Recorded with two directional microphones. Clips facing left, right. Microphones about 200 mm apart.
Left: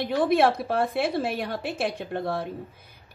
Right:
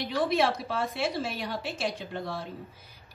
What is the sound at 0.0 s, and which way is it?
A woman's voice, 55° left (ahead or behind).